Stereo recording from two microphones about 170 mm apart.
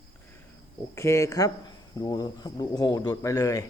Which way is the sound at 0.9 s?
15° left (ahead or behind).